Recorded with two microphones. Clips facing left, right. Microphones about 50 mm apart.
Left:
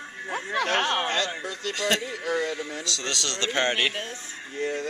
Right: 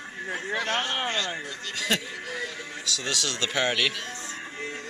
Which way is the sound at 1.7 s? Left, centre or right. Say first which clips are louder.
Left 1 dB; centre.